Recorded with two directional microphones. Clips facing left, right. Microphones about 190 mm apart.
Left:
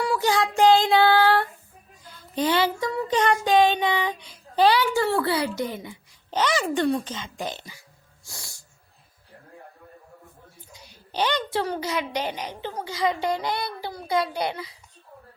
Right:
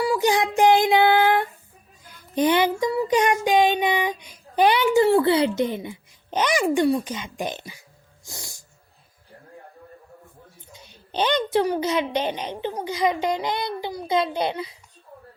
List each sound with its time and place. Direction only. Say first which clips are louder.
0.2 s child singing: even; 15° right (ahead or behind)
2.0 s music: right 4 dB; 15° right (ahead or behind)
2.9 s child singing: right 2 dB; 10° right (ahead or behind)
10.7 s a child's voice: right 3 dB; 20° right (ahead or behind)